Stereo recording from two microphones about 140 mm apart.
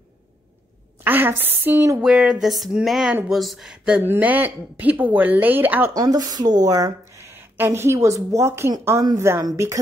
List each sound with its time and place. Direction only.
1.0 s a woman's voice: 15° right (ahead or behind)
2.0 s a sound: 5° right (ahead or behind)
3.3 s a woman's voice: centre (ahead or behind)
5.9 s speech: 25° right (ahead or behind)